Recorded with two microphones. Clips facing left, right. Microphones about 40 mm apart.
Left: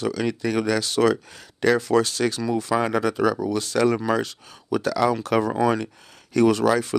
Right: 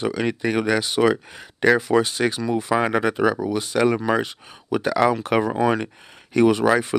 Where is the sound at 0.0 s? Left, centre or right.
Right.